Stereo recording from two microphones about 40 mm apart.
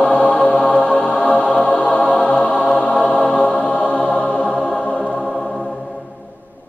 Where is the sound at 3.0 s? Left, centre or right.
Left.